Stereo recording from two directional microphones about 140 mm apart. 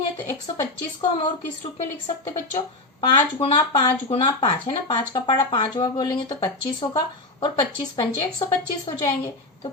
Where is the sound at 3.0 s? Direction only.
35° left (ahead or behind).